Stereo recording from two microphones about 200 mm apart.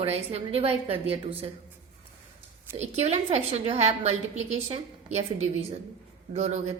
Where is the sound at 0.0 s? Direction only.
30° right (ahead or behind).